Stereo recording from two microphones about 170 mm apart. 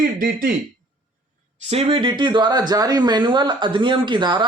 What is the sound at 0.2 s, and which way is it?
Speech, 55° right (ahead or behind).